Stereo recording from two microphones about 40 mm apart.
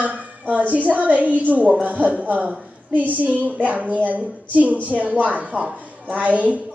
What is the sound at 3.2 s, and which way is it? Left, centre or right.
A woman's voice, right.